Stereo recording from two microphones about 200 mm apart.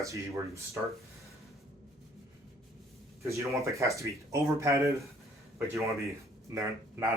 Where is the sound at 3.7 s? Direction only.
15° right (ahead or behind).